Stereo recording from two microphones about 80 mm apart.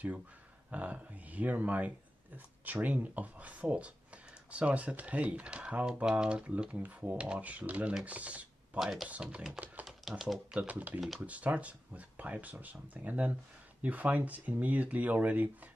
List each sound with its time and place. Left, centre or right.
0.7 s speech: centre
8.7 s speech: centre
9.1 s speech: centre
9.8 s typewriter: centre
10.5 s speech: centre